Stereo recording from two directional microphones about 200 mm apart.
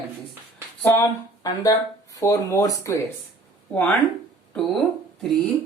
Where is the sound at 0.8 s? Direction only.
15° left (ahead or behind).